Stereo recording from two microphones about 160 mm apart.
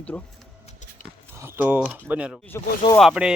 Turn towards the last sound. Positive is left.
turn(degrees=-5)  # may be behind; listen again after turning